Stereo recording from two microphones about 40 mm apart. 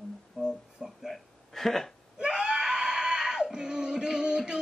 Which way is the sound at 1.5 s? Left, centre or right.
Centre.